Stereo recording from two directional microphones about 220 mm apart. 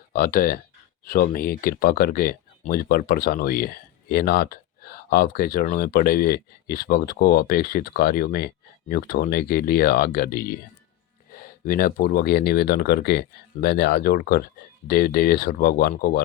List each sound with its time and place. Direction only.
0.1 s speech: 40° left (ahead or behind)